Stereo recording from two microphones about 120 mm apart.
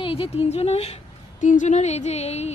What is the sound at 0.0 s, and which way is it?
Speech, 50° left (ahead or behind).